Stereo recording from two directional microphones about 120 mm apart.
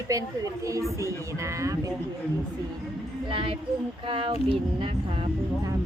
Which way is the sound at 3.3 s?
50° right (ahead or behind).